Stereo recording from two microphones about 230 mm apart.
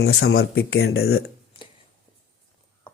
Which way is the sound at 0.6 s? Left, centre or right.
Left.